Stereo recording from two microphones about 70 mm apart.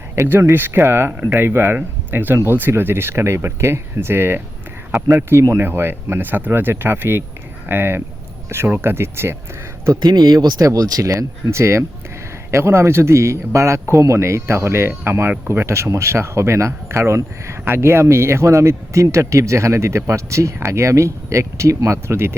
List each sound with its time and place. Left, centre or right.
0.2 s speech: right
10.0 s speech: right